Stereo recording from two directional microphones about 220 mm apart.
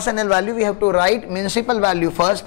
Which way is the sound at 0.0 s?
20° left (ahead or behind).